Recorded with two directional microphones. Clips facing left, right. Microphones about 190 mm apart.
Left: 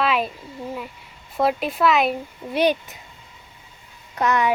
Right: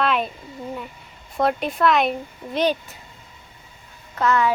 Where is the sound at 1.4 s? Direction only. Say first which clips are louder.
Even; 5° left (ahead or behind).